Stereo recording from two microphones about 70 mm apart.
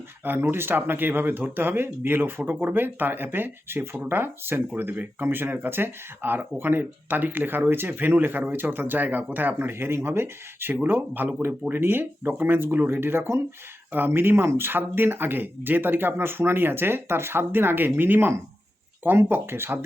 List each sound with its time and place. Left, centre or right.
0.3 s speech: right